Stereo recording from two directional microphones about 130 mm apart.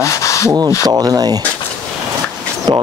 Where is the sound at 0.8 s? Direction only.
30° right (ahead or behind).